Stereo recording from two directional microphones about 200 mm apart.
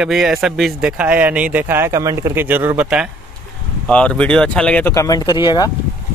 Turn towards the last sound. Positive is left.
turn(degrees=20)  # may be behind; listen again after turning